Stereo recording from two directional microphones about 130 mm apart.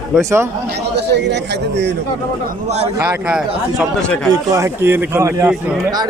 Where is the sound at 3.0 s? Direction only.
15° right (ahead or behind).